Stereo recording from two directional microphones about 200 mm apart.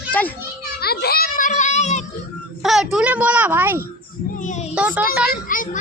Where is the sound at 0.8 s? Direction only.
50° left (ahead or behind); by 2.0 s 35° left (ahead or behind).